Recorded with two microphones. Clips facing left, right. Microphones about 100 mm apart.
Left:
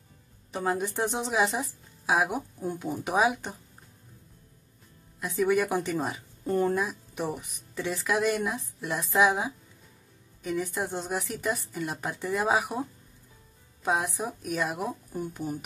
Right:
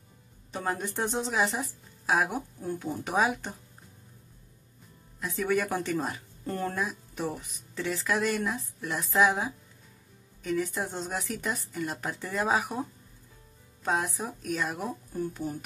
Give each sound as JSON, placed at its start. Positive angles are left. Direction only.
{"t": 0.5, "sound": "speech", "side_deg": 5}
{"t": 5.2, "sound": "speech", "side_deg": 10}
{"t": 13.8, "sound": "speech", "side_deg": 10}